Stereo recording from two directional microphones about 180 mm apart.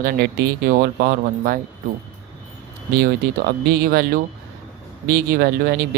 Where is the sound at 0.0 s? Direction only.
60° right (ahead or behind).